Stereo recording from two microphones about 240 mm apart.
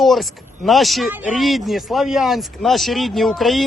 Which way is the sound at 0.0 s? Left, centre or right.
Centre.